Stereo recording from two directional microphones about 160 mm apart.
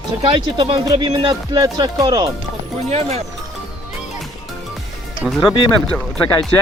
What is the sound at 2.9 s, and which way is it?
Speech, 40° right (ahead or behind).